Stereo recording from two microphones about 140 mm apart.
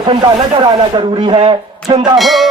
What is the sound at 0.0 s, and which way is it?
Speech, 35° right (ahead or behind).